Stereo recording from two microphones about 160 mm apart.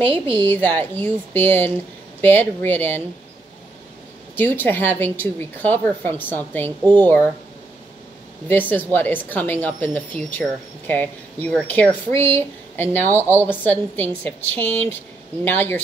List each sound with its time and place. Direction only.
0.0 s a woman's voice: 30° right (ahead or behind)
0.4 s speech: 10° left (ahead or behind)
4.4 s speech: 10° left (ahead or behind)
8.5 s speech: 10° left (ahead or behind)